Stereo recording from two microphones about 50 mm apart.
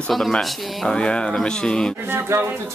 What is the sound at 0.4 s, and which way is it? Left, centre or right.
Speech, centre.